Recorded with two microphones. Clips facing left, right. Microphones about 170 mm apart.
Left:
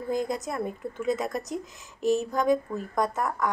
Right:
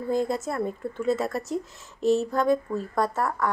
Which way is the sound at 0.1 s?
15° left (ahead or behind).